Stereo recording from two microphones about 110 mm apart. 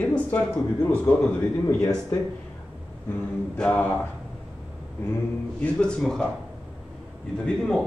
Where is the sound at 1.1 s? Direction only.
20° left (ahead or behind).